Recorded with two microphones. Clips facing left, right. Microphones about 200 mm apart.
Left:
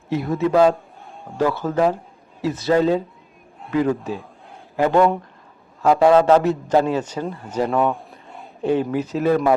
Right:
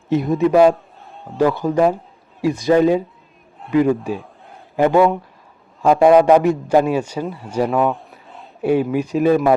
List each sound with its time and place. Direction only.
0.1 s a man's voice: 15° right (ahead or behind)